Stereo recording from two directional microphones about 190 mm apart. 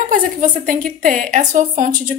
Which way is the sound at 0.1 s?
45° right (ahead or behind).